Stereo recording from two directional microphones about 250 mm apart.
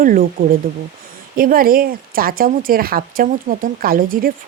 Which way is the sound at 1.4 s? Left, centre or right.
Right.